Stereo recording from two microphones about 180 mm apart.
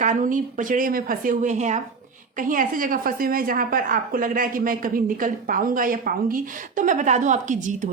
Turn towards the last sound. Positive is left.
turn(degrees=-45)  # may be behind; listen again after turning